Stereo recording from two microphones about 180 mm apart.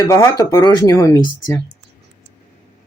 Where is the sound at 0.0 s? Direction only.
20° left (ahead or behind).